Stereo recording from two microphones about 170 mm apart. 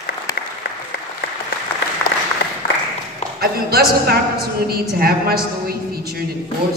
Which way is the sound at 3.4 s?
65° right (ahead or behind).